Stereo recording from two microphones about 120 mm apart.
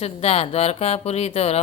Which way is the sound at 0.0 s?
55° left (ahead or behind).